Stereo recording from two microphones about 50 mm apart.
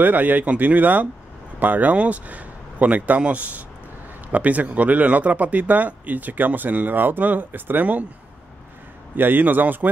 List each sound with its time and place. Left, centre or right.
0.0 s speech: right
9.1 s speech: right